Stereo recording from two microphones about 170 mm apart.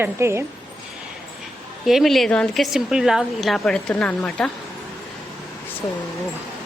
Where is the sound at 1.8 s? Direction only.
Centre (ahead or behind).